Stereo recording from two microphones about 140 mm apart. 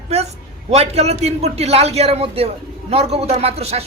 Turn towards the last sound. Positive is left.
turn(degrees=-45)  # may be behind; listen again after turning